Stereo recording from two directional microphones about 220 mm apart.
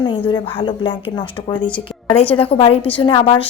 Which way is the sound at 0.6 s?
20° left (ahead or behind).